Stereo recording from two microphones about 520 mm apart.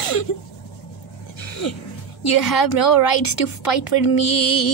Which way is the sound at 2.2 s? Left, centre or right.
Left.